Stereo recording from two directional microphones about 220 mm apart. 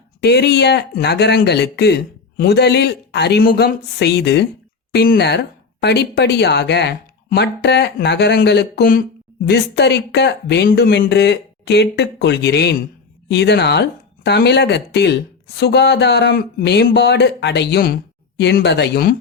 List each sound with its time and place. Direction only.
0.2 s speech: 50° left (ahead or behind)